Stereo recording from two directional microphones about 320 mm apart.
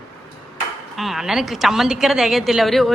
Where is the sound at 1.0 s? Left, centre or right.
Centre.